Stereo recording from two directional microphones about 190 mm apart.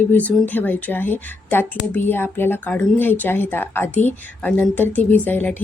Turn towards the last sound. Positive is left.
turn(degrees=10)  # may be behind; listen again after turning